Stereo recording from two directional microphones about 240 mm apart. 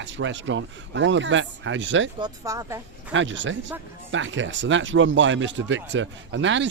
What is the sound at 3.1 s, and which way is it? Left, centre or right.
Speech, right.